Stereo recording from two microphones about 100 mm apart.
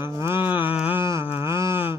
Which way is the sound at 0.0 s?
25° right (ahead or behind).